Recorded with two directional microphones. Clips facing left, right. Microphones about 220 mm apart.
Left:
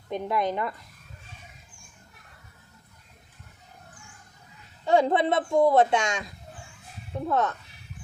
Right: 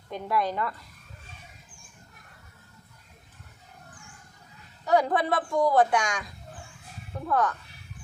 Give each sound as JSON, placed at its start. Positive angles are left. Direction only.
{"t": 0.1, "sound": "a man's voice", "side_deg": 20}
{"t": 4.9, "sound": "a man's voice", "side_deg": 25}